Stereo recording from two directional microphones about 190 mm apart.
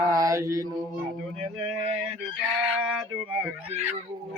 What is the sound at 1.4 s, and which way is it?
Speech, 30° right (ahead or behind).